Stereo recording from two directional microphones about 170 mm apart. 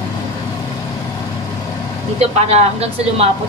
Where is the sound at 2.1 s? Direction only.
35° right (ahead or behind).